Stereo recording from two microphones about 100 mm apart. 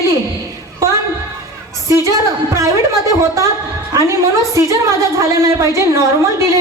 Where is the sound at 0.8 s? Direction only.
30° right (ahead or behind).